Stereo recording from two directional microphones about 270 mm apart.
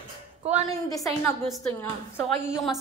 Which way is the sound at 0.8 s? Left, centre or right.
Centre.